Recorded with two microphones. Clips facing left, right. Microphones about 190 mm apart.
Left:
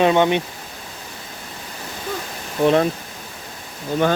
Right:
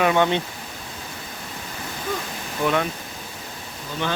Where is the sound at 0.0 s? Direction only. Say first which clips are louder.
Left 3 dB; 20° left (ahead or behind).